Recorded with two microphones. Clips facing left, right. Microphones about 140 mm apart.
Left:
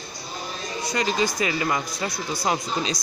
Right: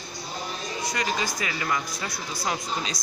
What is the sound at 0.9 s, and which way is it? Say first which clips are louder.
A man's voice: left 6 dB; 25° left (ahead or behind).